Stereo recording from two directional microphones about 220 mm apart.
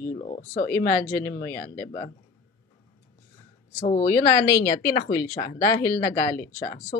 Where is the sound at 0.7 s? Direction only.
10° left (ahead or behind).